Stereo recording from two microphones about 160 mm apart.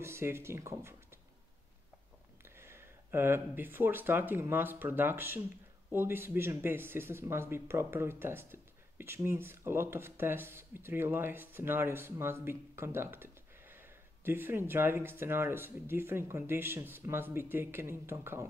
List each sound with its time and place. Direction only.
0.0 s speech: 15° right (ahead or behind)
2.4 s speech: 15° right (ahead or behind)